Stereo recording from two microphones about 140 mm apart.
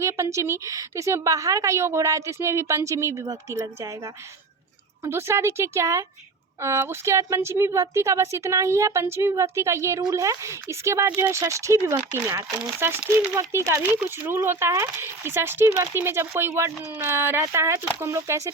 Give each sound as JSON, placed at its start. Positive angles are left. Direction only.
{"t": 0.0, "sound": "speech", "side_deg": -20}